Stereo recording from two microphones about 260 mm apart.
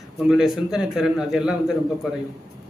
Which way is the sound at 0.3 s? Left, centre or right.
Centre.